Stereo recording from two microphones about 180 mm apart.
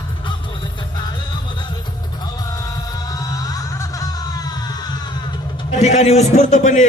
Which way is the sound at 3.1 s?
20° left (ahead or behind).